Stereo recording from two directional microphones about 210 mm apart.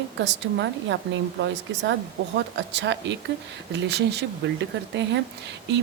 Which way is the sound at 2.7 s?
55° right (ahead or behind).